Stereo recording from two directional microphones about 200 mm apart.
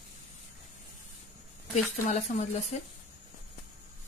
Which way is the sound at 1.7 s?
35° left (ahead or behind).